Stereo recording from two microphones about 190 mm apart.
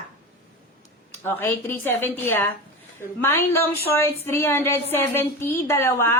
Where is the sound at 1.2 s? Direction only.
10° left (ahead or behind).